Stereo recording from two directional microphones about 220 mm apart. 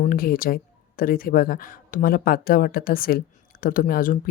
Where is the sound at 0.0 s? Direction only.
40° left (ahead or behind).